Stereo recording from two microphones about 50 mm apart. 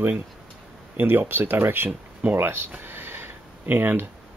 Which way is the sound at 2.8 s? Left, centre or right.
Right.